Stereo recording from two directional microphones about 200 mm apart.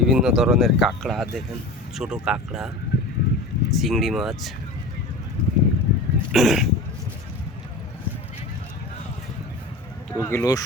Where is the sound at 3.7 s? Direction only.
Centre (ahead or behind).